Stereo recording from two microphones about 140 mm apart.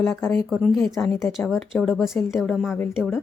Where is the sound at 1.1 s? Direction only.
20° left (ahead or behind).